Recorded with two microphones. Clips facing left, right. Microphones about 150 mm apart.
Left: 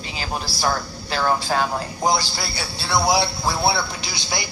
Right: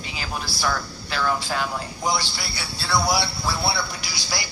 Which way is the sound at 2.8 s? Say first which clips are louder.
Left 3 dB; 20° left (ahead or behind).